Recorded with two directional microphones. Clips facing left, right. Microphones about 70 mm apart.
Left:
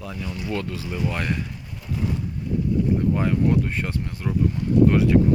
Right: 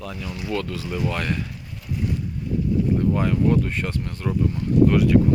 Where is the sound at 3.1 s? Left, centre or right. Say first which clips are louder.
Right 1 dB; centre.